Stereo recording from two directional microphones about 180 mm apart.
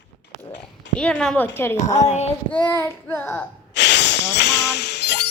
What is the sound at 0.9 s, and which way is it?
Speech, 5° left (ahead or behind).